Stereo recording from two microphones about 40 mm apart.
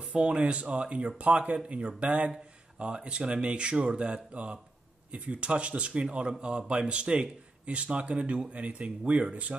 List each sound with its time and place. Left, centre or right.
0.0 s speech: right